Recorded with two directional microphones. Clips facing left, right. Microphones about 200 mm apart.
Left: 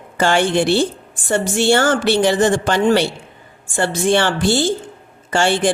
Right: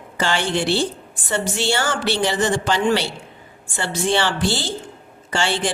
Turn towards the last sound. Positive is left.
turn(degrees=50)  # may be behind; listen again after turning